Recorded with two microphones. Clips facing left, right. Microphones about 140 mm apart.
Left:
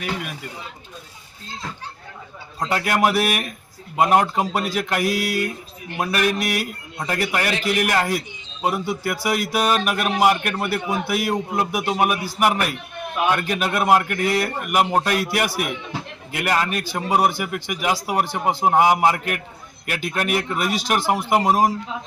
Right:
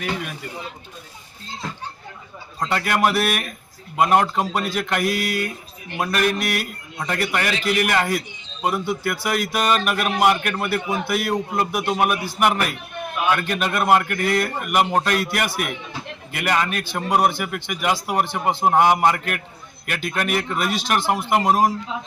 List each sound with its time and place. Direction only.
2.7 s speech: 5° left (ahead or behind)